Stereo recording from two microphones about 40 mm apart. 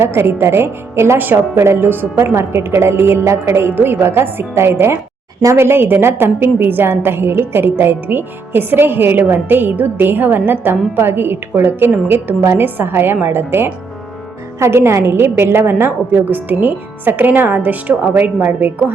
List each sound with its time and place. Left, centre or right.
0.0 s a woman's voice: right
1.2 s a woman's voice: right
8.0 s a woman's voice: right
14.7 s a woman's voice: right
16.1 s speech: right